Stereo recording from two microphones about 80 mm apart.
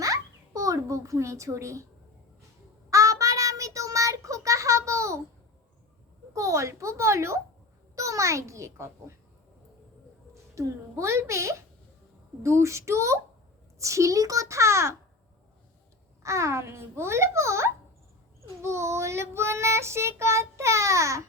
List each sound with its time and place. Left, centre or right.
0.0 s a sound: right
2.9 s child singing: right
6.3 s child singing: right
10.5 s child singing: right
16.2 s child singing: right